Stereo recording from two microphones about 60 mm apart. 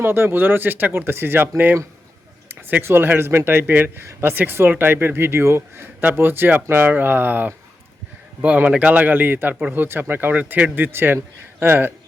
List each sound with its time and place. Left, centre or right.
0.0 s speech: right